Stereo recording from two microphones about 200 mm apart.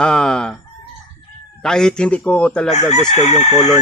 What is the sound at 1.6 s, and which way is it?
Fowl, 5° left (ahead or behind).